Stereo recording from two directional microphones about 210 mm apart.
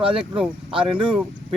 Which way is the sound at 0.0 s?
25° right (ahead or behind).